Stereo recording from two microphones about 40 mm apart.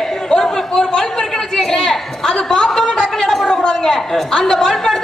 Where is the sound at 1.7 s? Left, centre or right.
Centre.